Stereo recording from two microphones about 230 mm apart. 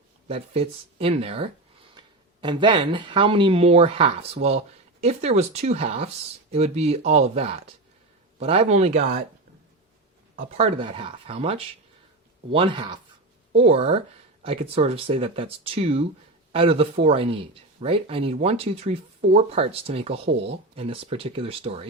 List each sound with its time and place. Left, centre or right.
0.3 s speech: right
10.6 s speech: right